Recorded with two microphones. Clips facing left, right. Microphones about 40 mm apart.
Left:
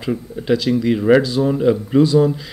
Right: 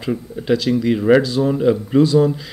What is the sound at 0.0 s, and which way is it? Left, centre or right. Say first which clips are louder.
Speech: even; centre.